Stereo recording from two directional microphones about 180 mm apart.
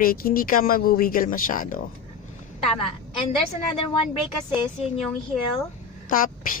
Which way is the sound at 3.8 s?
30° left (ahead or behind).